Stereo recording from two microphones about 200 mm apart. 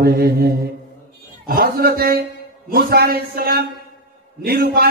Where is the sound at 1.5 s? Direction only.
50° right (ahead or behind).